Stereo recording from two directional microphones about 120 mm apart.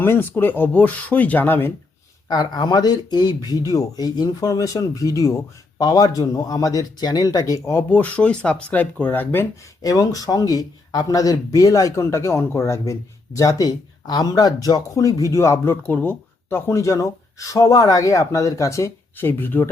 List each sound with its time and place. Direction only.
0.0 s speech: 20° left (ahead or behind)
2.3 s speech: 35° left (ahead or behind)
7.9 s speech: 10° left (ahead or behind)
9.8 s speech: 30° left (ahead or behind)